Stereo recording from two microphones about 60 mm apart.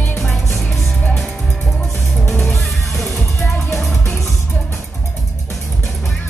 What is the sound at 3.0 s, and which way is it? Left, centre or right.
Music, centre.